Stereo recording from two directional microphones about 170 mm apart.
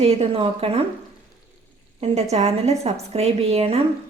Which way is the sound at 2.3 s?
40° right (ahead or behind).